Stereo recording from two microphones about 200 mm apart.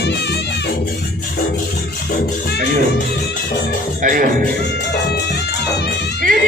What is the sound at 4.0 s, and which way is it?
Speech, 40° right (ahead or behind).